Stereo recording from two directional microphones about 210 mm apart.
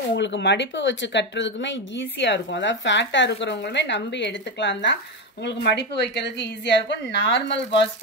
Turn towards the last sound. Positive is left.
turn(degrees=55)  # may be behind; listen again after turning